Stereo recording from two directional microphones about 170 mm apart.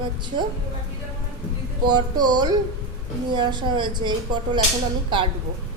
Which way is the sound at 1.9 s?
25° right (ahead or behind).